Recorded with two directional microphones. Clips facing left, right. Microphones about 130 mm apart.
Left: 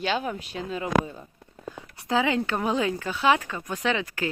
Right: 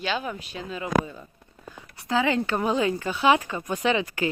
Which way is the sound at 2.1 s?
10° left (ahead or behind).